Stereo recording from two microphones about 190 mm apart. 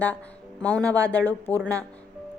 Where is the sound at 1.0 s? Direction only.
10° left (ahead or behind).